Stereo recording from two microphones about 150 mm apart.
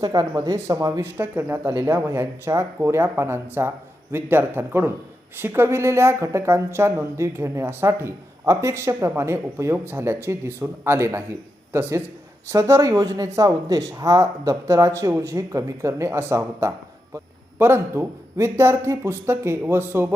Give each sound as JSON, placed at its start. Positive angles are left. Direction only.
{"t": 0.0, "sound": "speech", "side_deg": -25}